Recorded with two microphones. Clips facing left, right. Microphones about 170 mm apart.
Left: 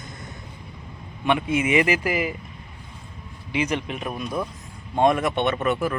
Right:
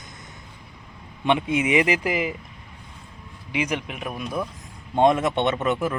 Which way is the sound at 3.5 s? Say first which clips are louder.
Left 2 dB; 10° right (ahead or behind).